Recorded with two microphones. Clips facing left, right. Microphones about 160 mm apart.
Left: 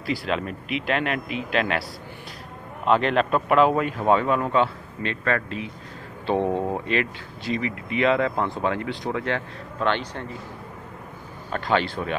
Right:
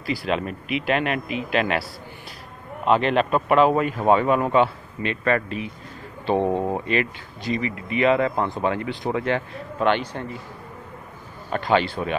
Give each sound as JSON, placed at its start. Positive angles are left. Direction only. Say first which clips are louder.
{"t": 0.0, "sound": "speech", "louder": "right 1 dB", "side_deg": 0}
{"t": 2.9, "sound": "speech", "louder": "right 1 dB", "side_deg": -5}
{"t": 11.5, "sound": "speech", "louder": "right 2 dB", "side_deg": -5}